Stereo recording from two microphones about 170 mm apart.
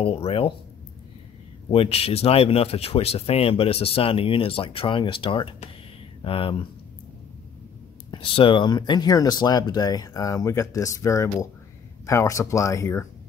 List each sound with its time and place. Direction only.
0.0 s speech: 35° left (ahead or behind)
1.7 s speech: 35° left (ahead or behind)
8.1 s speech: 30° left (ahead or behind)